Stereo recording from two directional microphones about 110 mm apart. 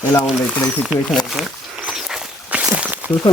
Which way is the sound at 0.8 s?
Centre (ahead or behind).